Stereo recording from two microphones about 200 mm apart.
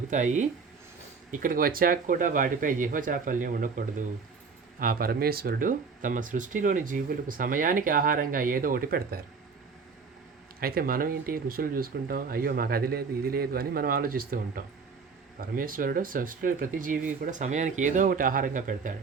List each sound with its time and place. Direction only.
0.1 s speech: 40° right (ahead or behind)
10.6 s speech: 50° right (ahead or behind)